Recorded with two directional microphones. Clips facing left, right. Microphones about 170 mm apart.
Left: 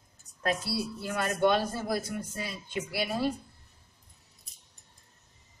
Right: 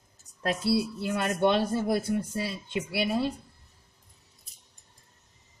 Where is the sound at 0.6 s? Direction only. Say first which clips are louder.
Right 7 dB; 25° right (ahead or behind).